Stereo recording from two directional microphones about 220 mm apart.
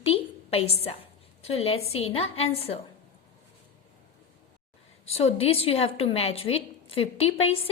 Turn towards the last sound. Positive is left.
turn(degrees=25)  # may be behind; listen again after turning